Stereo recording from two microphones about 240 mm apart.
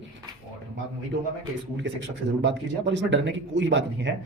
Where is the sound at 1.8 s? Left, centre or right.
Right.